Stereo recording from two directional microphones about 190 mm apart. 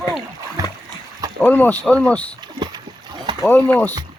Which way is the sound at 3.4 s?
10° left (ahead or behind).